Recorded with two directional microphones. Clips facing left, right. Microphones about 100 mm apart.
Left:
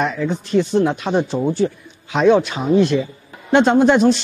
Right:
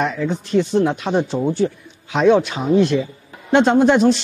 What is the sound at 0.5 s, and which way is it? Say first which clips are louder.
Speech: even; 20° left (ahead or behind).